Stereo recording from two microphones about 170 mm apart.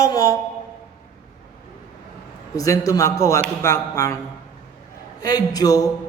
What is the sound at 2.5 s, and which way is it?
A man's voice, 20° left (ahead or behind).